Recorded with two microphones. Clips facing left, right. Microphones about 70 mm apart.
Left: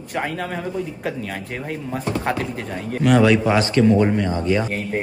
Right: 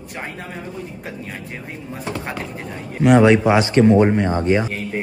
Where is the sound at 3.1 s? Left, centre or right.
Right.